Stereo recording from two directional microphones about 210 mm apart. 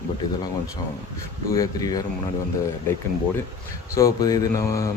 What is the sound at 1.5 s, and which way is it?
Speech, 15° left (ahead or behind).